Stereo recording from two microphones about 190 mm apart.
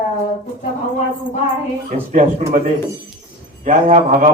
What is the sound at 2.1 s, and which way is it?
Speech, 40° right (ahead or behind).